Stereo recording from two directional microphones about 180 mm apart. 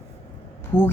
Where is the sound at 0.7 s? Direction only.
10° left (ahead or behind).